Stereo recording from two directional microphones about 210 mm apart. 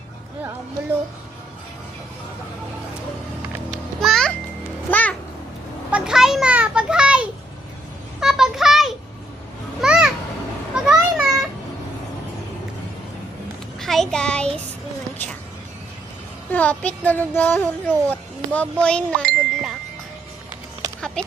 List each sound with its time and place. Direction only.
3.7 s music: centre (ahead or behind)
5.9 s a sound: centre (ahead or behind)
10.8 s children playing: 5° right (ahead or behind)
13.7 s child singing: centre (ahead or behind)
16.5 s speech: 5° left (ahead or behind)
21.2 s speech: 5° left (ahead or behind)